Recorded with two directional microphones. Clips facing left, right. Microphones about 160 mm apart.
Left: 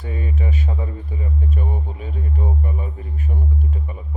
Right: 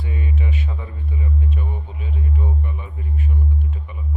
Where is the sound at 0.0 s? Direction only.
40° left (ahead or behind).